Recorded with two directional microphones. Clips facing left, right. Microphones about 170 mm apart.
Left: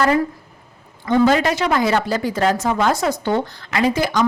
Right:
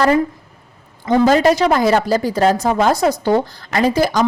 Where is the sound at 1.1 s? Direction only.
40° right (ahead or behind).